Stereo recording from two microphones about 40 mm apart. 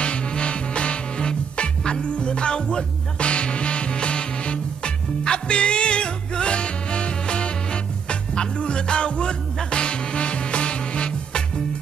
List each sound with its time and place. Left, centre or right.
0.0 s music: left